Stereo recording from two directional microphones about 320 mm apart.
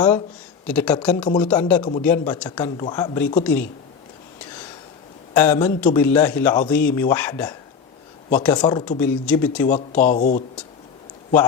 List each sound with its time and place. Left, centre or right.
0.7 s speech: centre
5.3 s speech: centre
9.6 s speech: left